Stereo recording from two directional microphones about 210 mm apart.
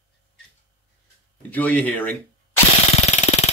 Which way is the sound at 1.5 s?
5° left (ahead or behind).